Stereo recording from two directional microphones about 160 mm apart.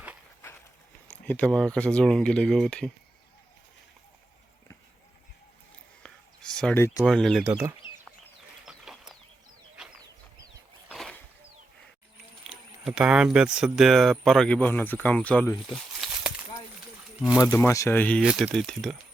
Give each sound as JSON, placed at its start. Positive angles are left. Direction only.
{"t": 1.1, "sound": "speech", "side_deg": 10}
{"t": 6.0, "sound": "a sound", "side_deg": 5}
{"t": 6.7, "sound": "speech", "side_deg": 15}
{"t": 7.0, "sound": "speech", "side_deg": 5}
{"t": 7.4, "sound": "speech", "side_deg": -15}
{"t": 8.6, "sound": "chicken", "side_deg": -5}
{"t": 10.8, "sound": "a sound", "side_deg": 5}
{"t": 12.5, "sound": "speech", "side_deg": -5}
{"t": 15.5, "sound": "a sound", "side_deg": 0}
{"t": 17.5, "sound": "speech", "side_deg": 15}
{"t": 18.2, "sound": "speech", "side_deg": -5}